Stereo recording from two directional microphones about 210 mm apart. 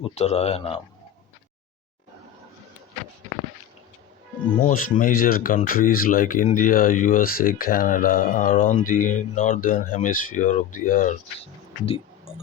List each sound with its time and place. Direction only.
0.0 s a man's voice: 30° left (ahead or behind)
4.6 s speech: 40° left (ahead or behind)